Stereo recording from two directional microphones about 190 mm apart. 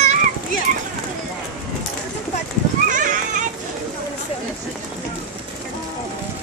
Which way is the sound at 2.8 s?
45° right (ahead or behind).